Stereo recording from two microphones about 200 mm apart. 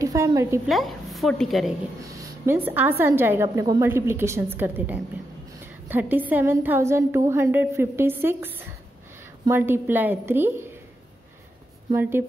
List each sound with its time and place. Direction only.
0.0 s a woman's voice: 15° right (ahead or behind)
0.7 s a woman's voice: centre (ahead or behind)
2.0 s a woman's voice: 15° right (ahead or behind)
11.9 s a woman's voice: 10° right (ahead or behind)